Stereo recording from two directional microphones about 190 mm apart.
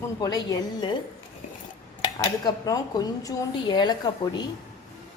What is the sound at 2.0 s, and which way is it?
Speech, 20° left (ahead or behind).